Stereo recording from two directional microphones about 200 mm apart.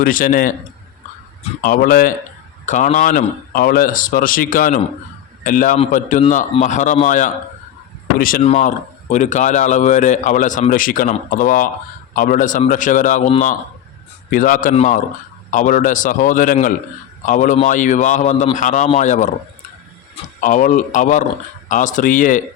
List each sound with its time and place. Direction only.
0.0 s speech: 40° left (ahead or behind)
1.6 s a man's voice: 45° left (ahead or behind)
20.4 s a man's voice: 40° left (ahead or behind)